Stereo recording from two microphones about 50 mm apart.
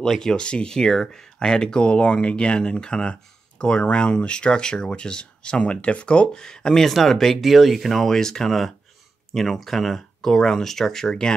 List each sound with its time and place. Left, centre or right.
0.0 s speech: centre